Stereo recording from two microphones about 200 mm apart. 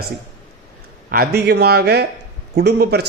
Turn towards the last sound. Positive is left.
turn(degrees=-55)  # may be behind; listen again after turning